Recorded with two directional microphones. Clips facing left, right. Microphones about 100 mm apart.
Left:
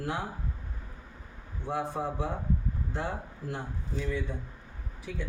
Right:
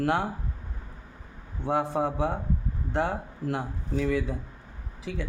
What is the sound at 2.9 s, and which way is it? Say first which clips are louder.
Speech: right 9 dB; 80° right.